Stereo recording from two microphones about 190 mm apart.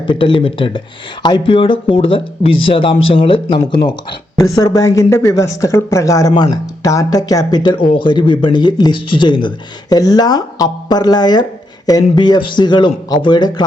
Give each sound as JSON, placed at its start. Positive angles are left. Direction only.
{"t": 0.1, "sound": "speech", "side_deg": 25}